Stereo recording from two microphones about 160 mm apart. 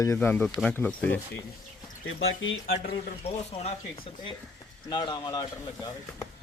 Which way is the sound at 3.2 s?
40° left (ahead or behind).